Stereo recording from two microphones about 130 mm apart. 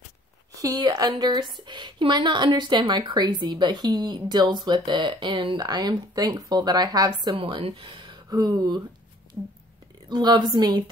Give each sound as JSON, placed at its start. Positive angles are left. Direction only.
{"t": 0.5, "sound": "speech", "side_deg": -25}
{"t": 9.4, "sound": "speech", "side_deg": -10}
{"t": 10.0, "sound": "speech", "side_deg": -35}